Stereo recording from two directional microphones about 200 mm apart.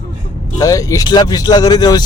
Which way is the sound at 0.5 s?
15° left (ahead or behind).